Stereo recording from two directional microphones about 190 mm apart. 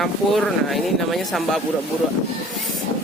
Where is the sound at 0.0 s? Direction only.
Centre (ahead or behind).